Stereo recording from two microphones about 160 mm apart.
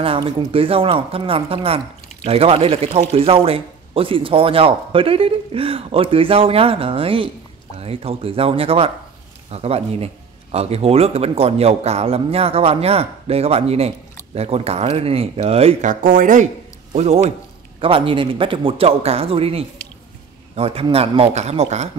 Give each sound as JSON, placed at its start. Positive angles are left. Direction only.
{"t": 0.0, "sound": "speech", "side_deg": -35}
{"t": 15.9, "sound": "speech", "side_deg": -55}